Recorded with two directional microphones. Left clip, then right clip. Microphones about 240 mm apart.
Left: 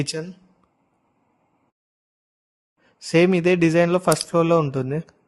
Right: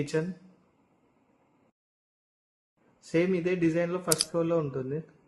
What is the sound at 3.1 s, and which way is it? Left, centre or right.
Speech, left.